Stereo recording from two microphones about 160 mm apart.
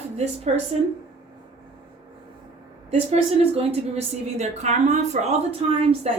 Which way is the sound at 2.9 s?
40° right (ahead or behind).